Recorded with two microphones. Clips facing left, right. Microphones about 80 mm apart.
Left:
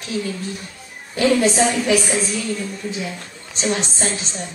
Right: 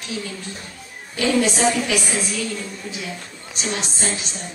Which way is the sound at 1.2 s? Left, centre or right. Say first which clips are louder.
Left 3 dB; left.